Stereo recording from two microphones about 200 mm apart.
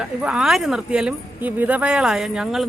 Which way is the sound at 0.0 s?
5° right (ahead or behind).